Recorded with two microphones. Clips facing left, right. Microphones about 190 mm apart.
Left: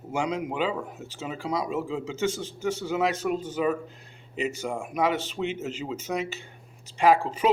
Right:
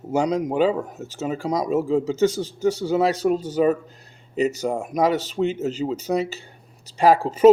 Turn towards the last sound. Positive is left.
turn(degrees=-40)  # may be behind; listen again after turning